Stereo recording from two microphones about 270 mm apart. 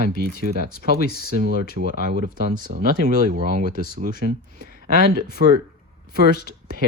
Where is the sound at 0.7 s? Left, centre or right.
Left.